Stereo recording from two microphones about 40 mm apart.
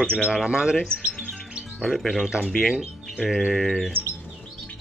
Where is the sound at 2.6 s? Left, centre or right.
Centre.